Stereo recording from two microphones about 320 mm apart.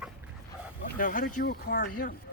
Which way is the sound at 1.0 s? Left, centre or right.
Left.